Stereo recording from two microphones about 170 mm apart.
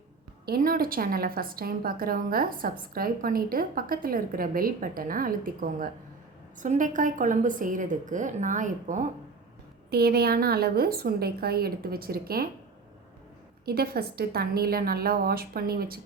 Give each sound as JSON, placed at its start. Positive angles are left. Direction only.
{"t": 0.4, "sound": "a woman's voice", "side_deg": -60}
{"t": 9.9, "sound": "a woman's voice", "side_deg": -65}
{"t": 13.7, "sound": "a woman's voice", "side_deg": -65}